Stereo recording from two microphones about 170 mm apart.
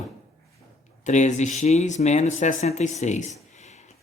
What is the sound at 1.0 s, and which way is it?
Speech, 45° left (ahead or behind).